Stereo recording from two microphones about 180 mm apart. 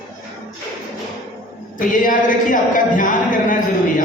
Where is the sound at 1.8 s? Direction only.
50° left (ahead or behind).